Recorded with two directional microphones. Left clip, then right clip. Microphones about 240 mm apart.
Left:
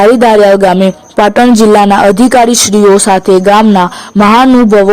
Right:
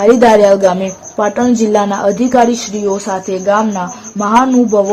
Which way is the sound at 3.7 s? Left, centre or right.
Left.